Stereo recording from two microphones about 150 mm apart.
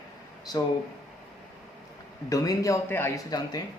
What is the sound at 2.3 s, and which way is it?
Speech, 20° left (ahead or behind).